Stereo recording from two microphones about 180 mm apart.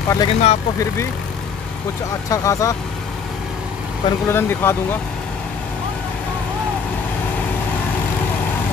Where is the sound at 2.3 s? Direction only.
20° left (ahead or behind).